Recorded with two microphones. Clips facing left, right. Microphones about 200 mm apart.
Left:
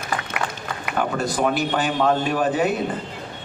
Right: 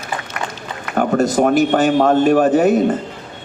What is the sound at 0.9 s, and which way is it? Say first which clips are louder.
A man's voice: right 8 dB; 45° right (ahead or behind).